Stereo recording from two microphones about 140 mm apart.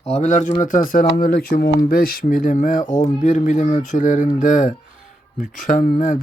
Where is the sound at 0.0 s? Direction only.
50° left (ahead or behind).